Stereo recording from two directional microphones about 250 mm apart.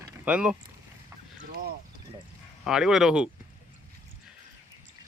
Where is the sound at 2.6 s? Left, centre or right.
Centre.